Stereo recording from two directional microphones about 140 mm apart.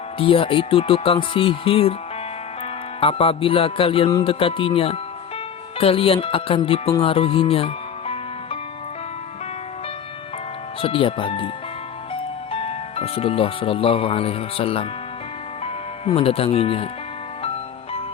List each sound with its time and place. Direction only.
0.2 s speech: 40° left (ahead or behind)
3.0 s speech: 45° left (ahead or behind)
7.0 s music: 40° left (ahead or behind)
10.8 s speech: 40° left (ahead or behind)
17.4 s music: 45° left (ahead or behind)